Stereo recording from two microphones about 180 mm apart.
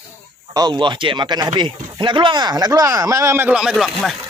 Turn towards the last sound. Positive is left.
turn(degrees=0)  # may be behind; listen again after turning